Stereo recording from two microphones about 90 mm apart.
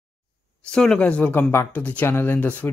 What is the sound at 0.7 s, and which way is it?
Speech, 10° left (ahead or behind).